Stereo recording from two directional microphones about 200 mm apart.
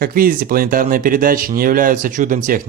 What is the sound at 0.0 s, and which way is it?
Speech, 45° right (ahead or behind).